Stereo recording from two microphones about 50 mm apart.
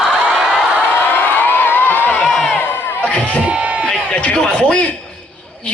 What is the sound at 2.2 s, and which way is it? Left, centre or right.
Crowd, centre.